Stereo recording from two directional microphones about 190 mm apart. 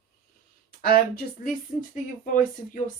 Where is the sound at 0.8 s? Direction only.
50° left (ahead or behind).